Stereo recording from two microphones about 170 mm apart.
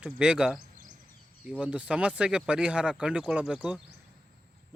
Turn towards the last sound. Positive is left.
turn(degrees=-5)  # may be behind; listen again after turning